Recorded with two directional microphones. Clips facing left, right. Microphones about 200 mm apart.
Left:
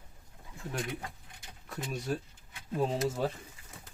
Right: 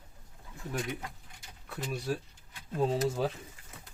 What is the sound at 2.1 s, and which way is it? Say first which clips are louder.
Speech: even; 5° right (ahead or behind).